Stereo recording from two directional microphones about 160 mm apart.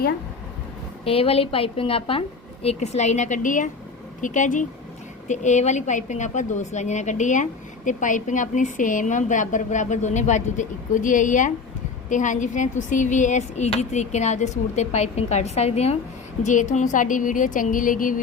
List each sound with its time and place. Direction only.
1.0 s a woman's voice: 35° left (ahead or behind); by 18.2 s 55° left (ahead or behind)